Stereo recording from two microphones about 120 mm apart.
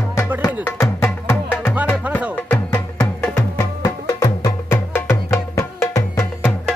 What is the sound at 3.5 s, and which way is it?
Music, 25° left (ahead or behind).